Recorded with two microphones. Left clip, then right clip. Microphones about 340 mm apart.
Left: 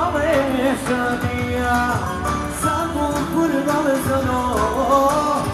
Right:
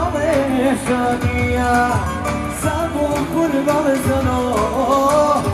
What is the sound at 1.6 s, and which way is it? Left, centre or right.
Music, centre.